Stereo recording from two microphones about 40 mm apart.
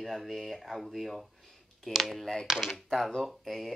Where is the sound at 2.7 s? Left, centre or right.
Centre.